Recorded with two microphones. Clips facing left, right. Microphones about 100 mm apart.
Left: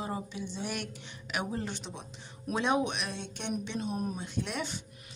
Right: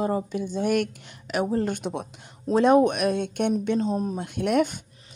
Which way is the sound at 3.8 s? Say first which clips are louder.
Right 8 dB; 30° right (ahead or behind).